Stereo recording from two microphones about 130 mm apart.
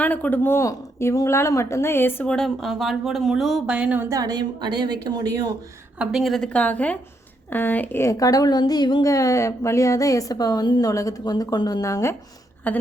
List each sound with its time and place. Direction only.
0.0 s speech: 10° left (ahead or behind)
2.3 s speech: centre (ahead or behind)
4.1 s a woman's voice: 30° right (ahead or behind)
6.0 s speech: centre (ahead or behind); by 12.1 s 25° left (ahead or behind)
12.7 s a woman's voice: 10° left (ahead or behind)